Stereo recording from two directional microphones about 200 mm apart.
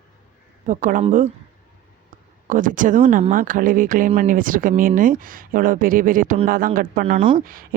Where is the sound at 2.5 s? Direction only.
40° right (ahead or behind).